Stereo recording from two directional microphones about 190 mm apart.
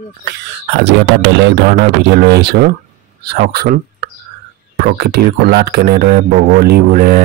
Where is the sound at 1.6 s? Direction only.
55° right (ahead or behind).